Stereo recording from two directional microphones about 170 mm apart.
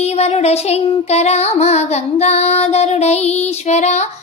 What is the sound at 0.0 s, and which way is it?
Child singing, 40° left (ahead or behind).